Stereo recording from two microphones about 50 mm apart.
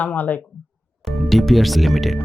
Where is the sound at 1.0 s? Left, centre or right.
Centre.